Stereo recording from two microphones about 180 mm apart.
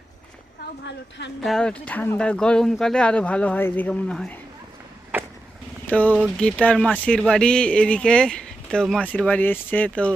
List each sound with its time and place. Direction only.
0.9 s a woman's voice: 80° left
1.5 s speech: 5° left (ahead or behind)
5.9 s speech: 10° left (ahead or behind)